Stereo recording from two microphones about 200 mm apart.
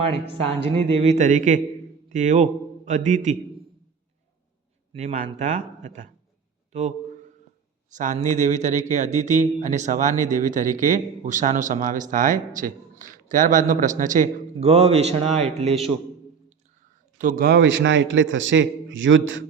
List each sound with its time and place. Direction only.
0.6 s a man's voice: 30° right (ahead or behind)
4.9 s a man's voice: 30° right (ahead or behind)
7.9 s speech: 40° right (ahead or behind)
17.2 s a man's voice: 45° right (ahead or behind); by 19.5 s 70° right (ahead or behind)